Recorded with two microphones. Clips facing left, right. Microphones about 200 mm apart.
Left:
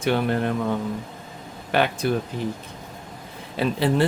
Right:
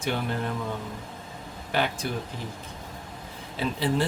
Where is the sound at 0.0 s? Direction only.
65° left (ahead or behind).